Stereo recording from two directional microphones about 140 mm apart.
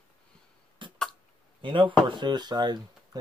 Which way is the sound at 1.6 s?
35° right (ahead or behind).